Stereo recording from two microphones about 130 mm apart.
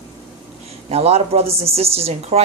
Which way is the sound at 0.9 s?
55° right (ahead or behind).